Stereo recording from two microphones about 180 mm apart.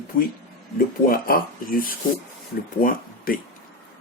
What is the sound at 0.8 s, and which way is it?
Speech, 55° left (ahead or behind).